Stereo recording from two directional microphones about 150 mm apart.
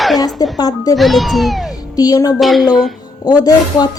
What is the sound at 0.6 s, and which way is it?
Speech, 25° left (ahead or behind).